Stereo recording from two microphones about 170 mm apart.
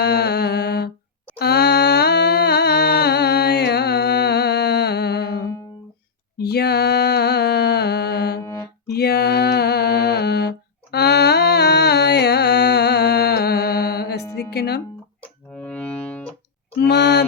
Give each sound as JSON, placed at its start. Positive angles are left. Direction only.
{"t": 0.0, "sound": "mantra", "side_deg": 75}
{"t": 1.4, "sound": "music", "side_deg": 70}
{"t": 6.3, "sound": "a sound", "side_deg": 70}
{"t": 8.4, "sound": "music", "side_deg": 20}
{"t": 8.9, "sound": "mantra", "side_deg": 70}
{"t": 10.9, "sound": "music", "side_deg": 75}
{"t": 15.2, "sound": "music", "side_deg": 10}
{"t": 16.7, "sound": "a sound", "side_deg": 75}